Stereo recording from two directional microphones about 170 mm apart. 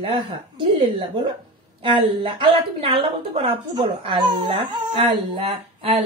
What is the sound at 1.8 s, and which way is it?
A woman's voice, 30° right (ahead or behind).